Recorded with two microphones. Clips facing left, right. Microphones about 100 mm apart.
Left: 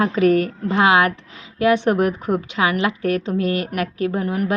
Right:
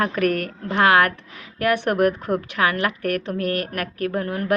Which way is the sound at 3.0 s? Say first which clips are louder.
Left 3 dB; 60° right (ahead or behind).